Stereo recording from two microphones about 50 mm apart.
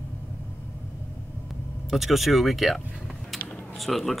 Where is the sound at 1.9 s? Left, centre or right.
Centre.